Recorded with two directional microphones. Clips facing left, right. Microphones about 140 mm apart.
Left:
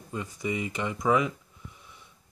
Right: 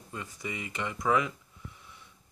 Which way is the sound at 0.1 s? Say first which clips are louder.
Left 7 dB; 20° left (ahead or behind).